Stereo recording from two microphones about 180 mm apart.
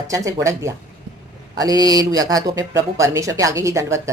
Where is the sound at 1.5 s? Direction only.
20° right (ahead or behind).